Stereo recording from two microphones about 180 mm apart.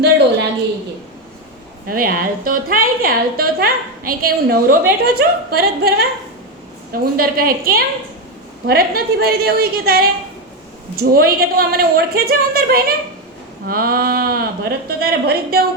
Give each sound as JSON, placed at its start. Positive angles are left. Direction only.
{"t": 1.9, "sound": "a woman's voice", "side_deg": -55}